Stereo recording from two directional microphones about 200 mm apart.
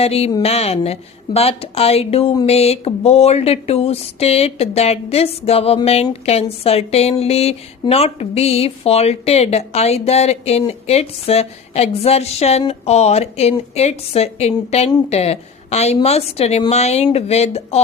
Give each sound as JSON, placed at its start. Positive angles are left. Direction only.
{"t": 0.0, "sound": "speech", "side_deg": 30}